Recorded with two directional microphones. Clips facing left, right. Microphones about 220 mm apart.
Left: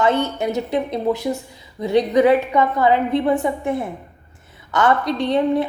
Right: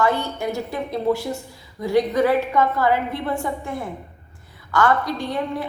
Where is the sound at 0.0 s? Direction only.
20° left (ahead or behind).